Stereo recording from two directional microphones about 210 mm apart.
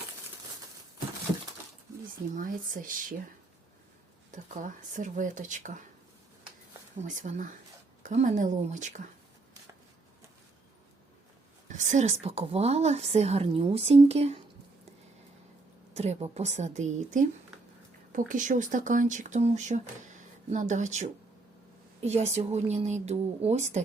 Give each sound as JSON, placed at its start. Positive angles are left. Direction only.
{"t": 2.3, "sound": "a woman's voice", "side_deg": -40}
{"t": 4.3, "sound": "a woman's voice", "side_deg": -35}
{"t": 7.0, "sound": "a woman's voice", "side_deg": -35}
{"t": 11.7, "sound": "a woman's voice", "side_deg": -35}
{"t": 16.0, "sound": "a woman's voice", "side_deg": -30}
{"t": 18.3, "sound": "a woman's voice", "side_deg": -40}